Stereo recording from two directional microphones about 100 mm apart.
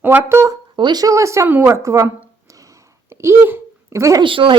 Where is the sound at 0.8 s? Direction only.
45° right (ahead or behind).